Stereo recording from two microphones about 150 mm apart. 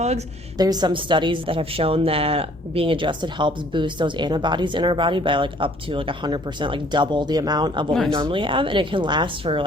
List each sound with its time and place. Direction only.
0.6 s a woman's voice: 25° right (ahead or behind)